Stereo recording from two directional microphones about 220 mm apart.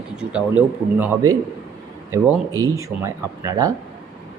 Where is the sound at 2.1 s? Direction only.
15° right (ahead or behind).